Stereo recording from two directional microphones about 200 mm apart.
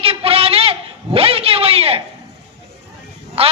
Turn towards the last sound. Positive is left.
turn(degrees=-30)  # may be behind; listen again after turning